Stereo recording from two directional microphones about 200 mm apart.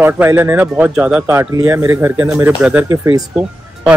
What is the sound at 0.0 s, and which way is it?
Speech, 10° right (ahead or behind).